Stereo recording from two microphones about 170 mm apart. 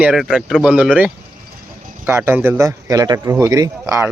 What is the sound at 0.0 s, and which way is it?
Speech, centre (ahead or behind).